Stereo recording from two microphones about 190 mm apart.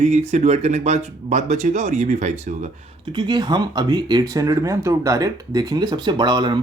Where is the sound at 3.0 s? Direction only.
25° right (ahead or behind).